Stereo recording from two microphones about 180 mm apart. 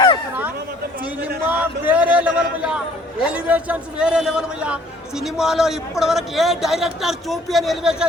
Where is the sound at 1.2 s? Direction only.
10° right (ahead or behind).